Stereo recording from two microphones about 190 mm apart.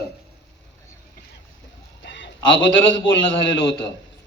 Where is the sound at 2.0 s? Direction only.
75° left (ahead or behind).